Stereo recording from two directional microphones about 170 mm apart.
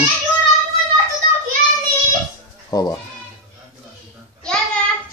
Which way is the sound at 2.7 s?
20° left (ahead or behind).